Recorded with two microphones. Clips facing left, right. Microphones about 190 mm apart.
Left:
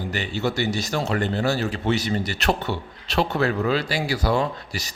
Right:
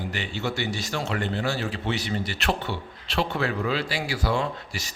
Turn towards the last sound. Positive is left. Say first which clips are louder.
# left 2 dB
turn(degrees=40)  # may be behind; listen again after turning